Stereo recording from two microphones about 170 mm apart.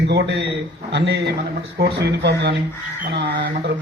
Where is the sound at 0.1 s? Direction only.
90° right.